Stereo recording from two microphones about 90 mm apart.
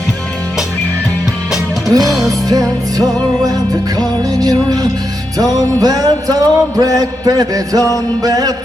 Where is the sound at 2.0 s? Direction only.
Centre (ahead or behind).